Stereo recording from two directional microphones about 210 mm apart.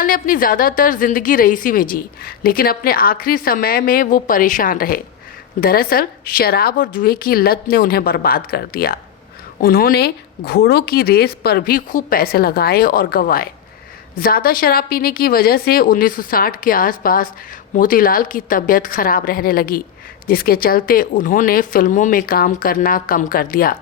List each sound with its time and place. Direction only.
0.0 s a woman's voice: 40° left (ahead or behind)